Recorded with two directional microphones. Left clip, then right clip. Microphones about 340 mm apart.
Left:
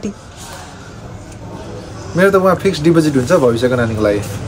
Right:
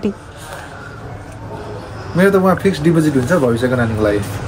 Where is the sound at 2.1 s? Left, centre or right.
Centre.